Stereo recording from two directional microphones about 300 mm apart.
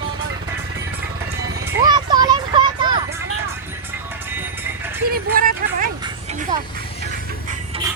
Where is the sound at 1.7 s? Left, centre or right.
Centre.